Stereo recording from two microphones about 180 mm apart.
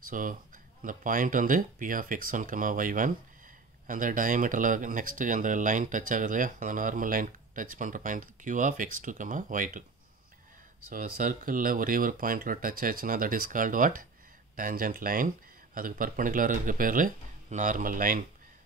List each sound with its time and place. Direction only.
0.1 s speech: 50° right (ahead or behind)
10.9 s speech: 50° right (ahead or behind)